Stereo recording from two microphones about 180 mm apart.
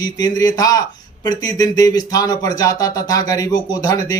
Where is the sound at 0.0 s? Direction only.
20° left (ahead or behind).